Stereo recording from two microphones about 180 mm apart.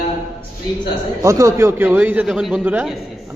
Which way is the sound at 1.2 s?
15° right (ahead or behind).